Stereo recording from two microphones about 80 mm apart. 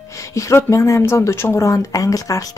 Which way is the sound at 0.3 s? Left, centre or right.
Left.